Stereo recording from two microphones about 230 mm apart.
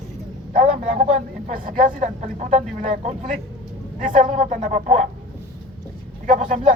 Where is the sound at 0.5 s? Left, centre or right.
Right.